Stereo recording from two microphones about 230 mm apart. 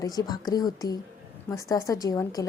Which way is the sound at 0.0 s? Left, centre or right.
Centre.